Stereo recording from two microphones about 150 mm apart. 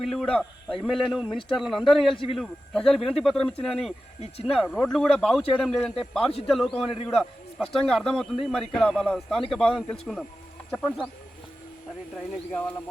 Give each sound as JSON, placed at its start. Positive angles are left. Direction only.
{"t": 0.0, "sound": "a man's voice", "side_deg": 0}
{"t": 1.3, "sound": "speech", "side_deg": 35}
{"t": 1.5, "sound": "a man's voice", "side_deg": 0}
{"t": 12.5, "sound": "speech", "side_deg": 10}